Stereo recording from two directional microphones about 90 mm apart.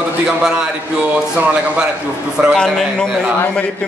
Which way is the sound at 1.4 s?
15° right (ahead or behind).